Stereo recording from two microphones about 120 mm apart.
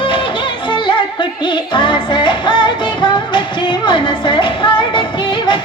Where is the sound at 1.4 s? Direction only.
40° left (ahead or behind).